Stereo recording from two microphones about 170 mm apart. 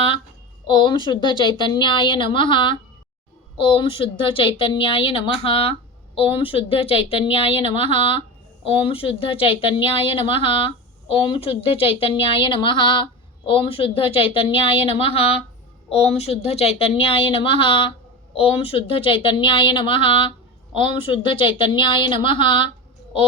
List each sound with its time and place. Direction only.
0.7 s a woman's voice: 25° left (ahead or behind)